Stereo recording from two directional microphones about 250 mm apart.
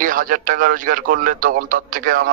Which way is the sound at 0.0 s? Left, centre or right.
Right.